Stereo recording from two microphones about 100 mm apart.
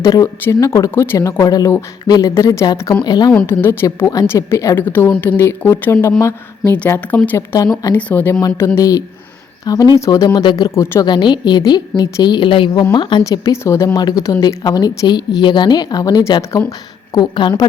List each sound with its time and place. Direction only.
0.0 s speech: 35° left (ahead or behind)
3.0 s a woman's voice: 45° left (ahead or behind)
3.4 s speech: 25° left (ahead or behind)
3.8 s speech: 35° left (ahead or behind)
4.8 s speech: 20° left (ahead or behind)
7.9 s speech: 15° left (ahead or behind); by 10.4 s 35° left (ahead or behind)
10.4 s a woman's voice: 50° left (ahead or behind)
12.8 s a woman's voice: 45° left (ahead or behind)
13.2 s speech: 35° left (ahead or behind)
17.2 s a woman's voice: 50° left (ahead or behind)